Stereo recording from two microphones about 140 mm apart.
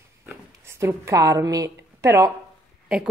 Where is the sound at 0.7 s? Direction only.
20° right (ahead or behind).